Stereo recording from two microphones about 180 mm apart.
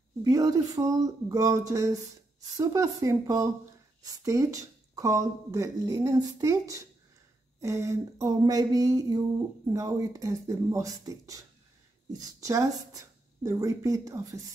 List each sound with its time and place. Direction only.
0.2 s speech: 20° right (ahead or behind)